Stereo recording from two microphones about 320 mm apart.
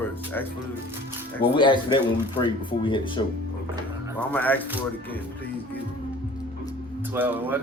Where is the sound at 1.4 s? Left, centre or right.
Centre.